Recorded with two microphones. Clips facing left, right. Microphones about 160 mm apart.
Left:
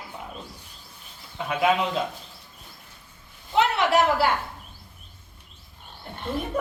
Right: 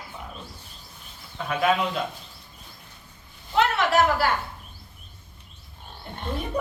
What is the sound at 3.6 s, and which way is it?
Speech, 20° left (ahead or behind).